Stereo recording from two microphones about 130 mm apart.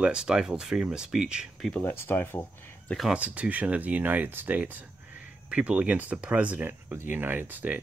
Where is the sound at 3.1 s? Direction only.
10° right (ahead or behind).